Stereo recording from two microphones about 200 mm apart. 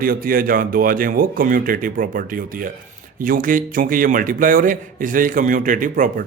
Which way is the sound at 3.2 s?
45° right (ahead or behind).